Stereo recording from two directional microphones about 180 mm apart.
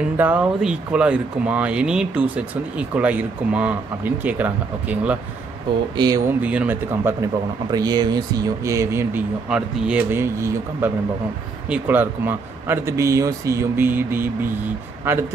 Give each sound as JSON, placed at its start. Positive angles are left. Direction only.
{"t": 0.2, "sound": "speech", "side_deg": -10}
{"t": 5.9, "sound": "speech", "side_deg": -20}
{"t": 6.4, "sound": "speech", "side_deg": -5}